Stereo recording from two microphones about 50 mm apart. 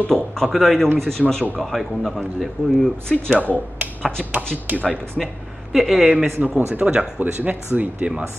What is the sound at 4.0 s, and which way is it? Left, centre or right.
Speech, centre.